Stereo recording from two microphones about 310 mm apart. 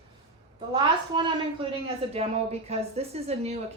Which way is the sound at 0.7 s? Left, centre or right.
Centre.